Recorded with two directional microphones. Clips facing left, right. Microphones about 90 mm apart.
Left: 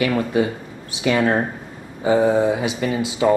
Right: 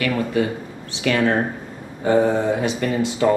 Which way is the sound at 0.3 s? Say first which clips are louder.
Left 1 dB; 20° left (ahead or behind).